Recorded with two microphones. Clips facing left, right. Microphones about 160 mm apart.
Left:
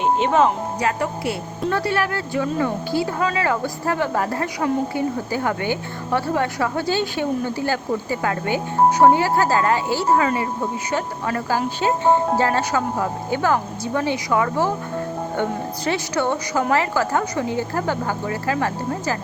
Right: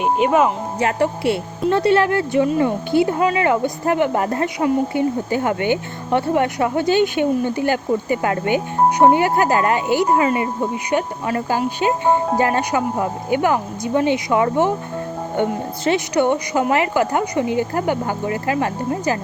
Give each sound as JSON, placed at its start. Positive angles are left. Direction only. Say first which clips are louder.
{"t": 0.0, "sound": "a woman's voice", "louder": "right 1 dB", "side_deg": -10}
{"t": 0.8, "sound": "a woman's voice", "louder": "right 8 dB", "side_deg": -25}